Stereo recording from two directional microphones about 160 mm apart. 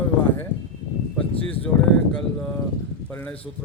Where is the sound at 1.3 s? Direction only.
35° left (ahead or behind).